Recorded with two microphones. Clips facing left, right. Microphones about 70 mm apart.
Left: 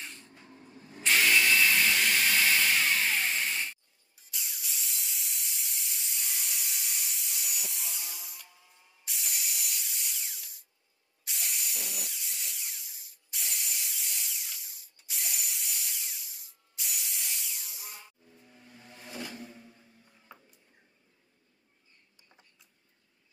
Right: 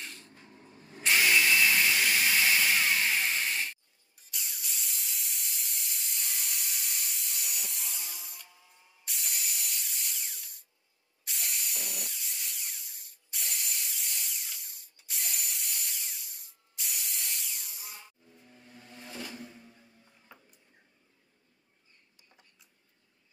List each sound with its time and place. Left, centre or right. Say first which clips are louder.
1.0 s drill: even; centre
4.3 s steam: even; centre
9.0 s spray: even; centre
11.2 s a sound: even; centre